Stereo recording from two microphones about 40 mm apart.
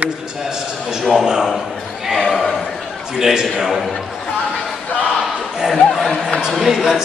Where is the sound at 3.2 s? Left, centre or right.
Centre.